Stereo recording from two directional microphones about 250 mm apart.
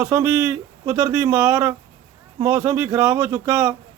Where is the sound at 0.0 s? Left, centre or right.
Centre.